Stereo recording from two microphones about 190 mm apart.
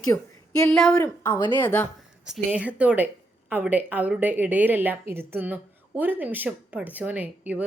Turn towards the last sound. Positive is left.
turn(degrees=-10)  # may be behind; listen again after turning